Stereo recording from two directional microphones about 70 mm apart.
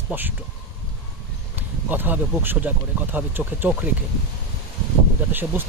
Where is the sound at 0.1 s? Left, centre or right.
Right.